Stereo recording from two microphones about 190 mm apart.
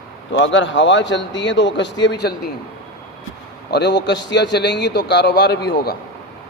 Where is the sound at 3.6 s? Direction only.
60° left (ahead or behind).